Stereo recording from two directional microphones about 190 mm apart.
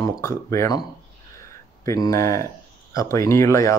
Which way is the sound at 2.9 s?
15° left (ahead or behind).